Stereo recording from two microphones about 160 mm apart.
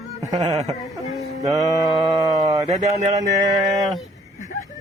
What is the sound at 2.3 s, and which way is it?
Speech, 20° right (ahead or behind).